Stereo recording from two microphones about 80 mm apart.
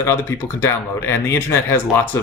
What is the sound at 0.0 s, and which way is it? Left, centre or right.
Speech, left.